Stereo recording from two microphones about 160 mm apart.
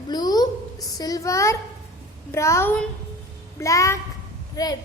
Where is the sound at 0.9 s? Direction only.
25° left (ahead or behind).